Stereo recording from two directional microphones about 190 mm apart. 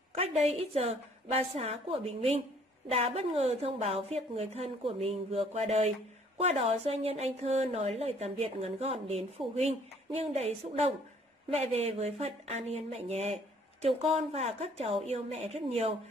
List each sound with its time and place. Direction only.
0.1 s a woman's voice: 30° right (ahead or behind)
11.5 s a woman's voice: 35° right (ahead or behind)